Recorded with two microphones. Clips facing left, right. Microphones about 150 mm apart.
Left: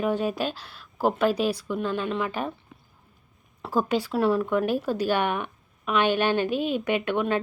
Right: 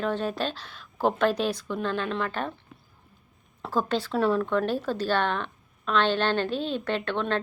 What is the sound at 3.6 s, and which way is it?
Speech, 10° left (ahead or behind).